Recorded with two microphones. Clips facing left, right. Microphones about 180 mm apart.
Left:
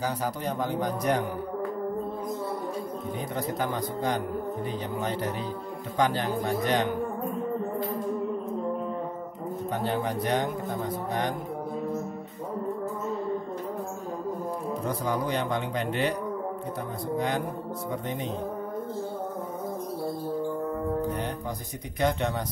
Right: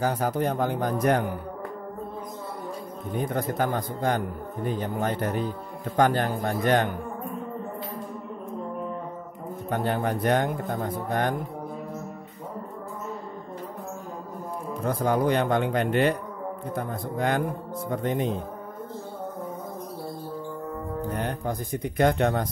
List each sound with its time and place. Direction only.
0.0 s speech: 55° right (ahead or behind)
3.2 s speech: 55° right (ahead or behind)
9.7 s speech: 50° right (ahead or behind)
14.9 s a man's voice: 55° right (ahead or behind)
18.0 s speech: 50° right (ahead or behind)
21.2 s speech: 55° right (ahead or behind)